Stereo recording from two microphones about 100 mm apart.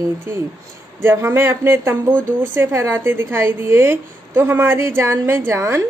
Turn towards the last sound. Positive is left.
turn(degrees=-25)  # may be behind; listen again after turning